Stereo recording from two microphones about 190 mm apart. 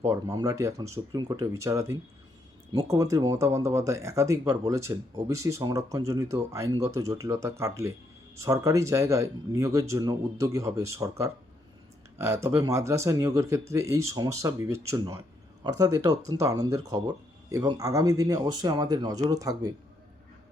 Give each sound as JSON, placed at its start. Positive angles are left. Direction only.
{"t": 0.1, "sound": "speech", "side_deg": -20}